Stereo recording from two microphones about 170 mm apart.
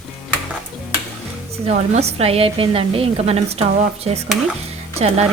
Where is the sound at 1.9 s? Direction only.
35° right (ahead or behind).